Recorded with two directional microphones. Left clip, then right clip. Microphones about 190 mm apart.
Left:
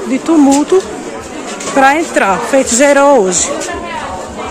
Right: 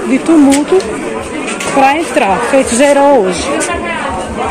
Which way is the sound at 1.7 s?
25° left (ahead or behind).